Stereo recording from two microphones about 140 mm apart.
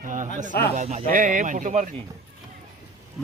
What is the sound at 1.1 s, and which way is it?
Speech, 65° right (ahead or behind).